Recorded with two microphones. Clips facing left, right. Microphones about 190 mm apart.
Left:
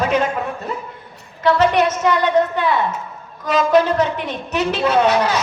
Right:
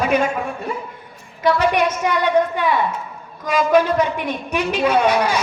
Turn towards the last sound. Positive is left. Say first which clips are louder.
# left 1 dB
turn(degrees=-10)  # may be behind; listen again after turning